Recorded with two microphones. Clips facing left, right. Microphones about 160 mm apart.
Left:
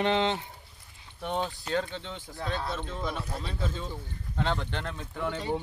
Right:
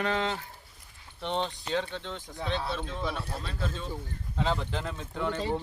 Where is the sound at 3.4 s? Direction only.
10° left (ahead or behind).